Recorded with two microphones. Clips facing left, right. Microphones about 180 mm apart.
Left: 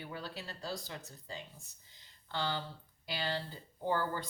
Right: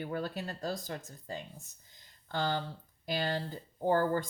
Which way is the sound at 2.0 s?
45° right (ahead or behind).